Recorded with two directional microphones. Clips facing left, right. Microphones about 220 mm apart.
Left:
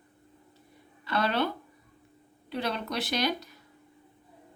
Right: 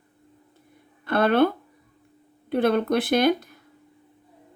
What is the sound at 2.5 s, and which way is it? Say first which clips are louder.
Speech: right 11 dB; 55° right (ahead or behind).